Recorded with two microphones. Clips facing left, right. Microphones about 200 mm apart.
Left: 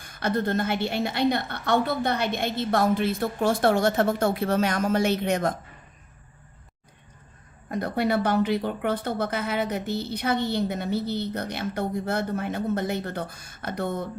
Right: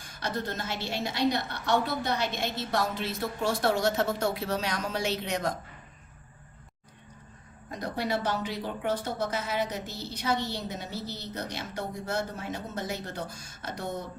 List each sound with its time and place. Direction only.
0.0 s speech: 55° left (ahead or behind)
7.7 s speech: 60° left (ahead or behind)